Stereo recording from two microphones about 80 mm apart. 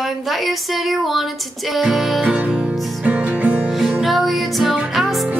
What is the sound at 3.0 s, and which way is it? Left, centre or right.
Music, centre.